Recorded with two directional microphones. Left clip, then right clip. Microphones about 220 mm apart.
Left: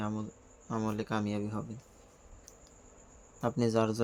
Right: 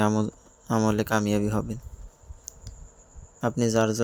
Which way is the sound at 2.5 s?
25° right (ahead or behind).